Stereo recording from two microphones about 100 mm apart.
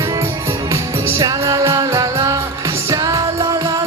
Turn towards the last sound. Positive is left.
turn(degrees=-40)  # may be behind; listen again after turning